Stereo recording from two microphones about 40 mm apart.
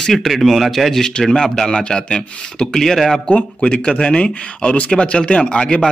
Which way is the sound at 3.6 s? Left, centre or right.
Left.